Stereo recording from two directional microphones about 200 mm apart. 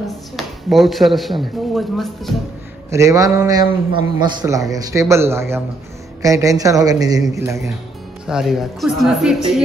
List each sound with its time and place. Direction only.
0.4 s speech: centre (ahead or behind)
2.9 s a man's voice: 15° right (ahead or behind)
8.3 s speech: centre (ahead or behind)